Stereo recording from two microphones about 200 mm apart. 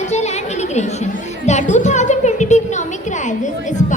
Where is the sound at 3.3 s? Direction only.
35° left (ahead or behind).